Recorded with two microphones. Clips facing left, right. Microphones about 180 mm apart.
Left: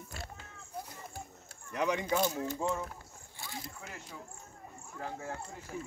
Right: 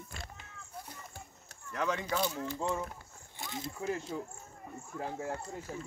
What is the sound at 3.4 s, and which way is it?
Speech, 20° right (ahead or behind).